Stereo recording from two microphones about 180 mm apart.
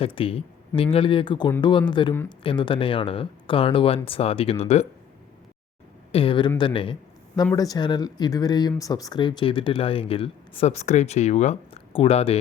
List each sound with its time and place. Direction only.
0.0 s speech: 30° left (ahead or behind)
6.1 s speech: 30° left (ahead or behind)